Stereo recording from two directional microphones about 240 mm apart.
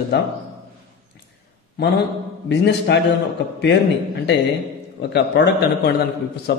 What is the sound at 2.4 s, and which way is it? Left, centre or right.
Speech, left.